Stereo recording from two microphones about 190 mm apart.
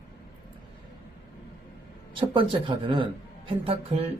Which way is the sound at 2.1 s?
25° right (ahead or behind).